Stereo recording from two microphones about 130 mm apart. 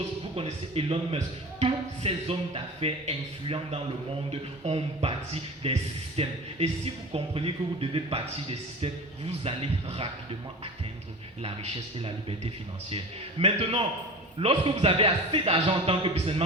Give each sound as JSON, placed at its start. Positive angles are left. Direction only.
{"t": 0.3, "sound": "speech", "side_deg": -50}
{"t": 11.4, "sound": "speech", "side_deg": -45}
{"t": 13.4, "sound": "speech", "side_deg": -45}